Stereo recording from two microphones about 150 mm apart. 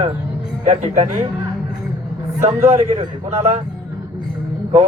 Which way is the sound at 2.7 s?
45° right (ahead or behind).